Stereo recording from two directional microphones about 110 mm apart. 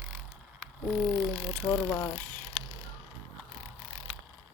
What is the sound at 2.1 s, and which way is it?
Speech, 15° left (ahead or behind).